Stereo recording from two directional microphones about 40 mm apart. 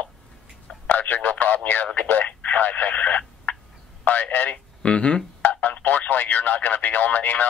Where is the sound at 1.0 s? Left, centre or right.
Left.